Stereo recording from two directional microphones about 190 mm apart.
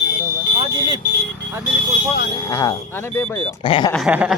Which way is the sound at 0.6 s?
25° right (ahead or behind).